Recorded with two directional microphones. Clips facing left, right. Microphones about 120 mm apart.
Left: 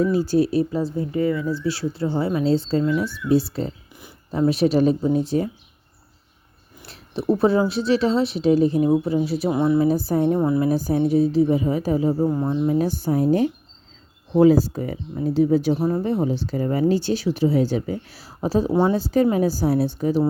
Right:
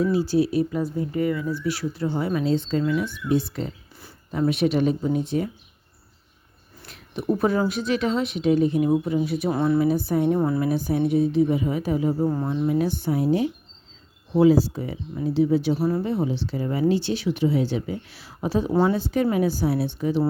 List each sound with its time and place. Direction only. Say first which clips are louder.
0.0 s speech: left 2 dB; 45° left (ahead or behind)
0.7 s speech: left 2 dB; 30° left (ahead or behind)
6.8 s speech: left 3 dB; 30° left (ahead or behind)
9.5 s speech: left 2 dB; 15° left (ahead or behind)
9.8 s speech: left 2 dB; 40° left (ahead or behind)
10.3 s speech: left 2 dB; 15° left (ahead or behind)
10.6 s speech: left 3 dB; 40° left (ahead or behind)
12.4 s speech: left 3 dB; 15° left (ahead or behind)
12.6 s speech: even; 35° left (ahead or behind)
15.8 s speech: left 1 dB; 20° left (ahead or behind)
16.2 s speech: left 3 dB; 45° left (ahead or behind)